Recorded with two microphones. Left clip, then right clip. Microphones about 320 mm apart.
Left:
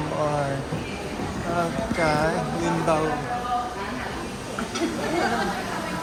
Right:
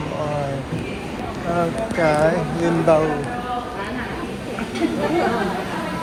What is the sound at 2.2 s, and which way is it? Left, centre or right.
Speech, centre.